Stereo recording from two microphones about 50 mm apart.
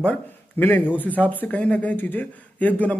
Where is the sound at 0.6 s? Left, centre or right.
Left.